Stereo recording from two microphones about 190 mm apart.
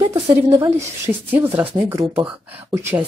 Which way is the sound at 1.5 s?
10° right (ahead or behind).